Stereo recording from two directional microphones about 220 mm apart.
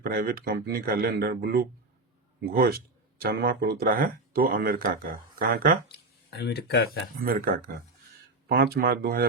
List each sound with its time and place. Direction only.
0.0 s speech: 40° right (ahead or behind)
5.9 s speech: 45° left (ahead or behind)
7.2 s speech: 40° right (ahead or behind)